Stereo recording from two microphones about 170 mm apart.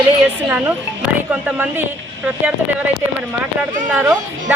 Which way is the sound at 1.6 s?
10° right (ahead or behind).